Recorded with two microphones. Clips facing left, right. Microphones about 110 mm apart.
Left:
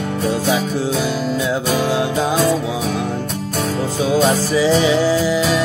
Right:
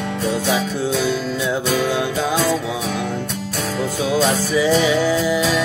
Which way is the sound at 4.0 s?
25° left (ahead or behind).